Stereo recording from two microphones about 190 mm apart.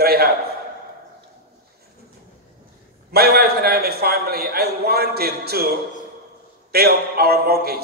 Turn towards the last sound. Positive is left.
turn(degrees=-55)  # may be behind; listen again after turning